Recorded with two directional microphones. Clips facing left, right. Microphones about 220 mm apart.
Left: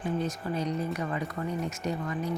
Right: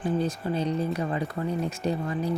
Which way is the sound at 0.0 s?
30° right (ahead or behind).